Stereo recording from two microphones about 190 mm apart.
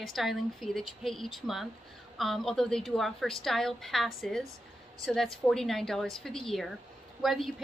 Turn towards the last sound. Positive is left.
turn(degrees=0)  # may be behind; listen again after turning